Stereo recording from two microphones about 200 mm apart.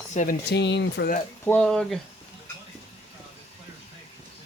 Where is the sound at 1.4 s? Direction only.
5° left (ahead or behind).